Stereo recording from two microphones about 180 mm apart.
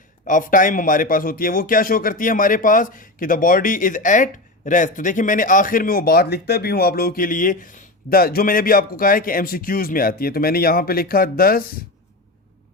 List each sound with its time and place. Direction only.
0.3 s a man's voice: 45° left (ahead or behind)